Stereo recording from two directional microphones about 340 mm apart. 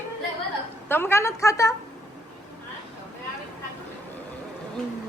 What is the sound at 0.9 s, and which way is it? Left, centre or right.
Speech, centre.